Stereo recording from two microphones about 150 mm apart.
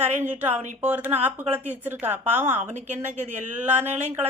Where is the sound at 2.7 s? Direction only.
50° right (ahead or behind).